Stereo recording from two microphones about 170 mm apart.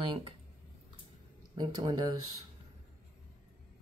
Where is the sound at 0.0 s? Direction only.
30° right (ahead or behind).